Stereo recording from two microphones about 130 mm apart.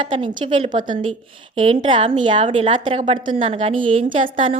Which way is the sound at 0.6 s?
80° right.